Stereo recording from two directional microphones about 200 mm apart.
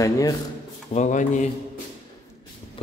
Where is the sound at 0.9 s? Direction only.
40° left (ahead or behind).